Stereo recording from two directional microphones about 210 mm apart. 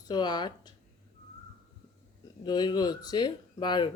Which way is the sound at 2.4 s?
20° left (ahead or behind).